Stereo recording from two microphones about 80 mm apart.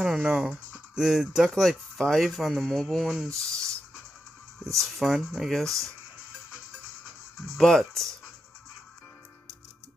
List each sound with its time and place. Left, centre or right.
0.0 s speech: centre
3.3 s speech: right
4.7 s speech: centre
7.3 s speech: centre